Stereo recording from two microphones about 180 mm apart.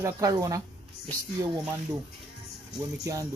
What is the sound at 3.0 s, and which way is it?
Speech, 20° right (ahead or behind).